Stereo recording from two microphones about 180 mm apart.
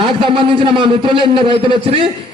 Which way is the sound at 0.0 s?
30° right (ahead or behind).